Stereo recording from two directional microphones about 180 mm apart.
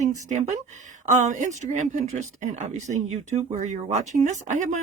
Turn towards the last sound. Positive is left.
turn(degrees=-45)  # may be behind; listen again after turning